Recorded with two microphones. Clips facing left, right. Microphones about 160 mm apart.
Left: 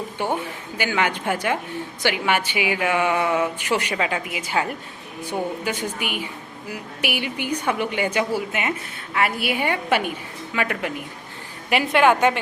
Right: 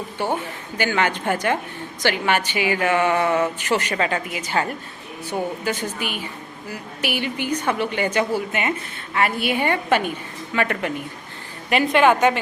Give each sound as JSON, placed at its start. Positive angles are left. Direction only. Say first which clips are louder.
{"t": 0.2, "sound": "a woman's voice", "louder": "right 1 dB", "side_deg": 15}